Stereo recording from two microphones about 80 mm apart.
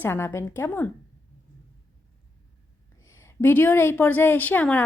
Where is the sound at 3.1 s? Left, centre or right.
Left.